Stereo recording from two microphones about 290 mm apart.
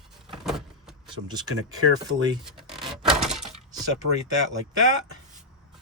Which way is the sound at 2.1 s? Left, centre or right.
Centre.